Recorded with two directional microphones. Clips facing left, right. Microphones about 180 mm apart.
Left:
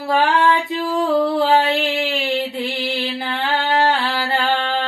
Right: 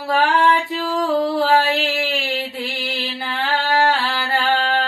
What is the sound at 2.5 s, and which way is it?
Music, 25° left (ahead or behind).